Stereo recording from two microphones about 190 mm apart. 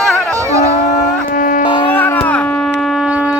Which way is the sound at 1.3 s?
45° left (ahead or behind).